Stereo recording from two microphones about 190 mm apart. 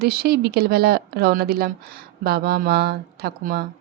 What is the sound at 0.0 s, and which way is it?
Speech, 55° right (ahead or behind).